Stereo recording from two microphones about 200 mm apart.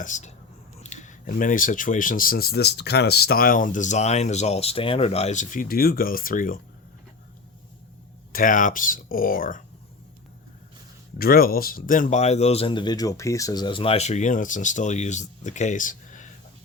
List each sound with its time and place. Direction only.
0.0 s speech: 35° left (ahead or behind)
8.3 s speech: 40° left (ahead or behind)
11.2 s speech: 50° left (ahead or behind)